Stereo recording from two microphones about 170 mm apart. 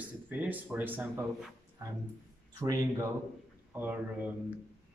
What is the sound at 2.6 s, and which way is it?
Speech, 20° right (ahead or behind).